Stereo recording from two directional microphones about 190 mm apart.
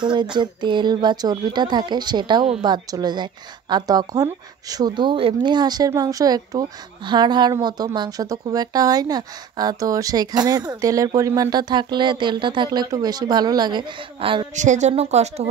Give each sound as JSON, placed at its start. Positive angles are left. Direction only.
{"t": 0.0, "sound": "a woman's voice", "side_deg": -25}
{"t": 14.5, "sound": "speech", "side_deg": -40}